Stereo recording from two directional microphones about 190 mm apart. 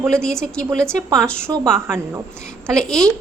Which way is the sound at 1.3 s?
10° right (ahead or behind).